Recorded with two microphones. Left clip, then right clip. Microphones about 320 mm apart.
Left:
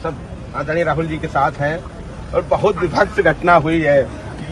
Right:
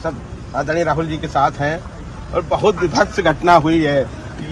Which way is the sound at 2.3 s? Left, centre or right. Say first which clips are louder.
Even; right.